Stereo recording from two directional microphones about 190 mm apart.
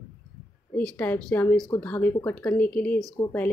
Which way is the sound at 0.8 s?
5° left (ahead or behind).